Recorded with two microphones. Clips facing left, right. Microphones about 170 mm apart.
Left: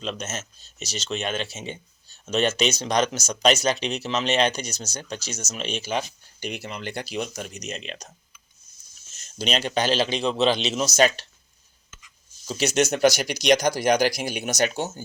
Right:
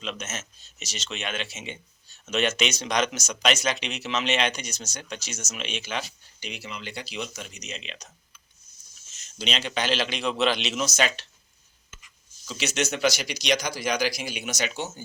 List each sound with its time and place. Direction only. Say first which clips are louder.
0.0 s speech: left 3 dB; 35° left (ahead or behind)
6.4 s speech: left 5 dB; 50° left (ahead or behind)
9.1 s speech: left 5 dB; 40° left (ahead or behind)
12.5 s speech: left 6 dB; 40° left (ahead or behind)